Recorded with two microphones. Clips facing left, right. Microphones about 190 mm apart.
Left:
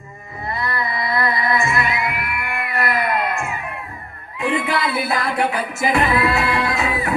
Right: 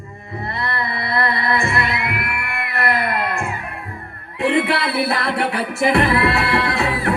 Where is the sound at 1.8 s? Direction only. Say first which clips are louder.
Even; 65° right (ahead or behind).